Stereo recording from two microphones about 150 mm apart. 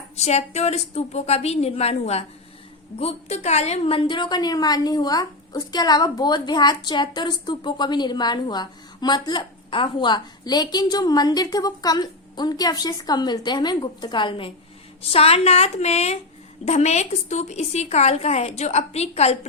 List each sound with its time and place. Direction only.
0.2 s a woman's voice: 45° left (ahead or behind)